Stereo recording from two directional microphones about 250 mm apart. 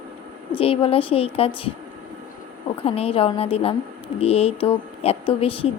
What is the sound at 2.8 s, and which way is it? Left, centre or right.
A woman's voice, left.